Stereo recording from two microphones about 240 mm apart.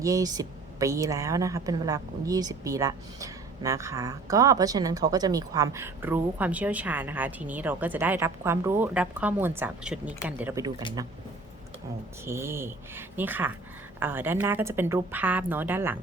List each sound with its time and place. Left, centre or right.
0.0 s a woman's voice: centre
12.2 s a woman's voice: centre